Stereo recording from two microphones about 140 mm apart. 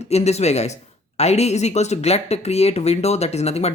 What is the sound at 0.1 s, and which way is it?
Speech, 50° left (ahead or behind).